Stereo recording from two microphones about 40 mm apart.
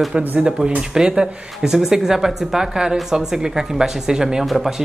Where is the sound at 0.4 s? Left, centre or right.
Right.